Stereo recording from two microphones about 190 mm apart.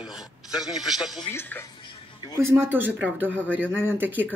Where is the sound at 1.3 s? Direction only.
10° left (ahead or behind).